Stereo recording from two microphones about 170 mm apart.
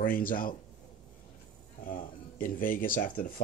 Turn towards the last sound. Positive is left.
turn(degrees=55)  # may be behind; listen again after turning